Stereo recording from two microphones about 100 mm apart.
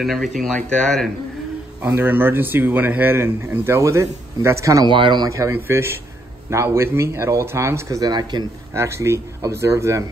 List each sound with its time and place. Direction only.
0.0 s speech: centre (ahead or behind)
1.8 s speech: 20° right (ahead or behind)
4.8 s speech: 55° right (ahead or behind)
5.3 s speech: 30° right (ahead or behind)
8.1 s speech: 45° right (ahead or behind)
8.7 s speech: 25° right (ahead or behind)